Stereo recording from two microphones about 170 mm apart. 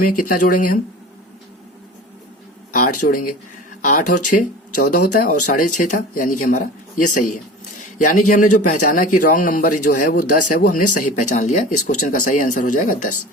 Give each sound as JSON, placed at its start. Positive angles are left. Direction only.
{"t": 0.0, "sound": "speech", "side_deg": 55}
{"t": 2.7, "sound": "speech", "side_deg": 55}